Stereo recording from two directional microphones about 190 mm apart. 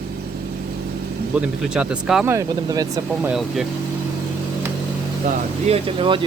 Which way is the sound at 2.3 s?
20° right (ahead or behind).